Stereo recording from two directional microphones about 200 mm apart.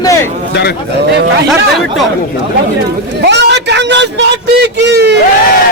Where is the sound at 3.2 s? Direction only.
60° right (ahead or behind).